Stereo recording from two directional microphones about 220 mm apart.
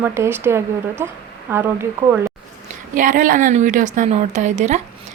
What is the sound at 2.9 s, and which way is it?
A woman's voice, 35° right (ahead or behind).